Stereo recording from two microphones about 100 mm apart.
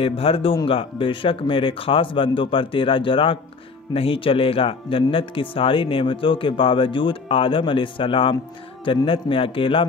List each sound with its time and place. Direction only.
0.0 s speech: 70° left (ahead or behind)